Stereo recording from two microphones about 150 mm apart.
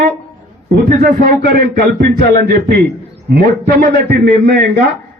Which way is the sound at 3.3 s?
80° right.